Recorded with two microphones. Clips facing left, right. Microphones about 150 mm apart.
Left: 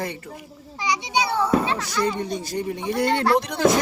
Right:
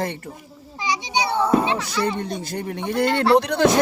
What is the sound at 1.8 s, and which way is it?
Speech, 55° right (ahead or behind).